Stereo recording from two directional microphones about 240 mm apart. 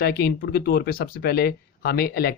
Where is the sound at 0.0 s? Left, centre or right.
Left.